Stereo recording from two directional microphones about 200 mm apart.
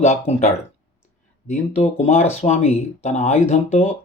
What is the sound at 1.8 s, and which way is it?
Speech, 30° left (ahead or behind).